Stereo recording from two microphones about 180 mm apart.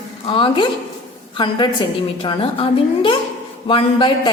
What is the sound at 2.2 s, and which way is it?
A woman's voice, 30° left (ahead or behind).